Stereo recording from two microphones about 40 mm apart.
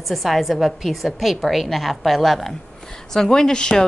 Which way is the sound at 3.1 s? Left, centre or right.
Centre.